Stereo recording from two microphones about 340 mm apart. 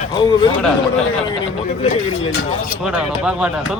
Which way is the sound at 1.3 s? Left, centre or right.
Centre.